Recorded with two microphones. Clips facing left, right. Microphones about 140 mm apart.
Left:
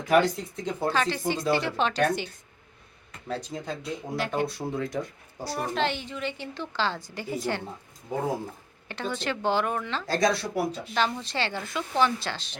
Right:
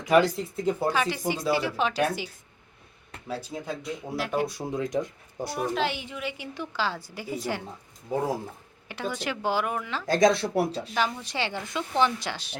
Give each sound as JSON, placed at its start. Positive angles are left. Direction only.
{"t": 0.1, "sound": "speech", "side_deg": 0}
{"t": 5.5, "sound": "speech", "side_deg": -5}
{"t": 8.9, "sound": "speech", "side_deg": -10}
{"t": 10.1, "sound": "speech", "side_deg": -20}
{"t": 10.9, "sound": "speech", "side_deg": -10}